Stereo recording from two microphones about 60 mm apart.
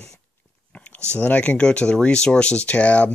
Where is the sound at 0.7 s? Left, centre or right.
Left.